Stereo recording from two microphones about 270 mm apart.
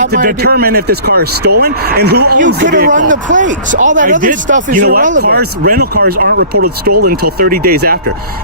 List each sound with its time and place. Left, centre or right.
0.0 s speech: right